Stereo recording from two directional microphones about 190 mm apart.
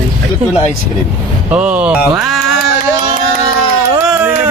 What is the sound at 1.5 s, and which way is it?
Speech, 5° right (ahead or behind).